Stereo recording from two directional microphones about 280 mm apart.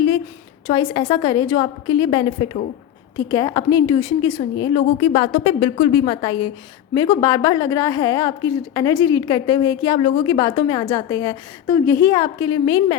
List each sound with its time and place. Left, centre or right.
0.7 s a woman's voice: centre